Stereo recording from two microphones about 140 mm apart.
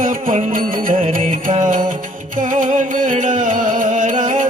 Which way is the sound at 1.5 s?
65° right (ahead or behind).